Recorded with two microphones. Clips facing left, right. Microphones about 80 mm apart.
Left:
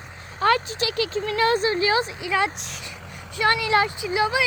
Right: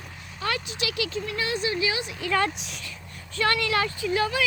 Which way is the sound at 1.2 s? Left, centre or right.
Left.